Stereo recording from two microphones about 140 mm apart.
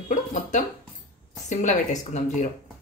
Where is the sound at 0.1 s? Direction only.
65° left (ahead or behind).